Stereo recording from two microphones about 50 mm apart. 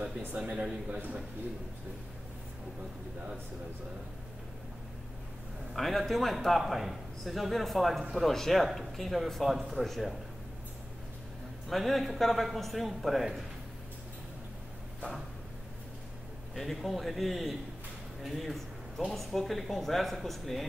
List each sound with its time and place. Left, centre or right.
0.5 s a man's voice: centre
0.8 s a man's voice: right
5.7 s speech: centre
11.7 s speech: centre
16.5 s speech: centre